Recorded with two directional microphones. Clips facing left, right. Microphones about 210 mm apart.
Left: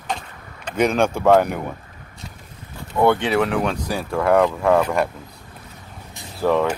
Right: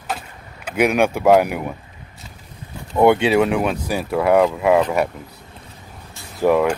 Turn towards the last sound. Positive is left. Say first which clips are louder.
# right 3 dB
turn(degrees=-10)  # may be behind; listen again after turning